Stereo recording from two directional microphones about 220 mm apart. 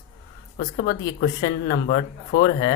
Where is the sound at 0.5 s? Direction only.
40° left (ahead or behind).